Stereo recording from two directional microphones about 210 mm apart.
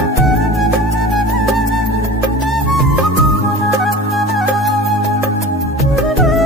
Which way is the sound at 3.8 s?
Centre (ahead or behind).